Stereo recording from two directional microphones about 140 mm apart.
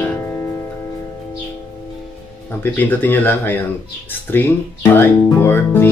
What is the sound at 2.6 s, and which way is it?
Speech, 15° left (ahead or behind).